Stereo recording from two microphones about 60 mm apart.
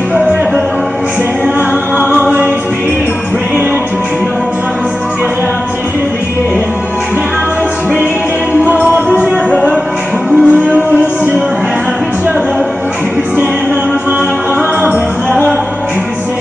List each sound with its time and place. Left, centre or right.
0.1 s music: right
2.1 s music: right
8.6 s music: right
9.2 s music: centre
14.8 s music: right